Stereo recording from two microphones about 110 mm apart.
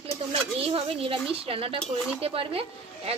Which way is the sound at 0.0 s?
60° right (ahead or behind).